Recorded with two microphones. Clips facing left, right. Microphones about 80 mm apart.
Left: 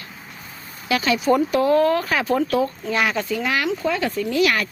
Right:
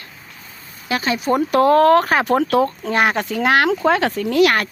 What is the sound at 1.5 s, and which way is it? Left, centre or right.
Speech, right.